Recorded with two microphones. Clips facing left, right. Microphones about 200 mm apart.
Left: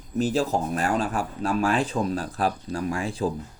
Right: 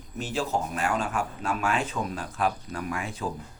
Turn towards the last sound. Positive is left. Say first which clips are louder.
# left 6 dB
turn(degrees=30)  # may be behind; listen again after turning